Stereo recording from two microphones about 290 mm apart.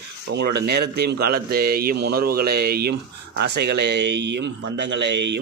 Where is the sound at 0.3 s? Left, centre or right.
Right.